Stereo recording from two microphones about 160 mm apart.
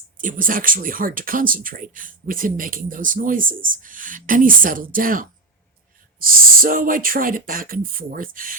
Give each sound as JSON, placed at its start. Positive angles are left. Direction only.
{"t": 0.2, "sound": "speech", "side_deg": -55}